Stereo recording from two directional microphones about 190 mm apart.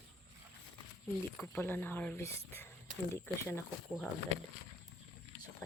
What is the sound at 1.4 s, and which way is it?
Speech, 10° left (ahead or behind).